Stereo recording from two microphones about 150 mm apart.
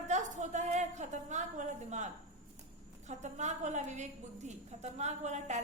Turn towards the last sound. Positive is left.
turn(degrees=-50)  # may be behind; listen again after turning